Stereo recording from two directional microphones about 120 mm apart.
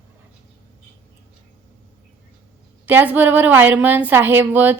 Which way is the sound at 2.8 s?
15° right (ahead or behind).